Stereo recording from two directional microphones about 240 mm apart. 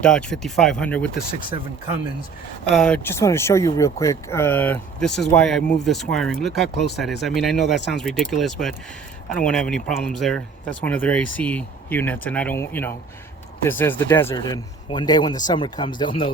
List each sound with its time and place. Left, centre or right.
0.0 s speech: centre
1.1 s speech: left
2.7 s speech: centre; by 16.3 s left